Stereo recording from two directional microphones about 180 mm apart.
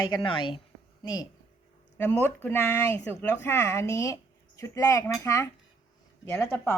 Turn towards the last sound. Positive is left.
turn(degrees=10)  # may be behind; listen again after turning